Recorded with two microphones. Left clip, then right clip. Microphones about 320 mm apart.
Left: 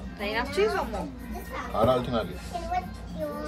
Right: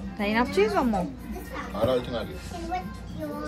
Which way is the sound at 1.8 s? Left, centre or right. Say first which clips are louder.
Left 1 dB; left.